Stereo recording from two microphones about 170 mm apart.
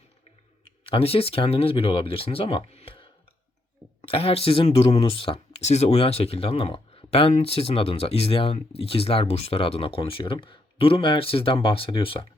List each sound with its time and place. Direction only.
0.9 s speech: 35° left (ahead or behind)